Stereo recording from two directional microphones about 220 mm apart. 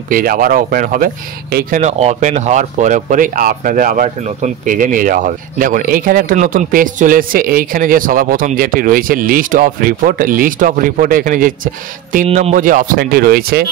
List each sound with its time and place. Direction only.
0.1 s speech: 40° right (ahead or behind)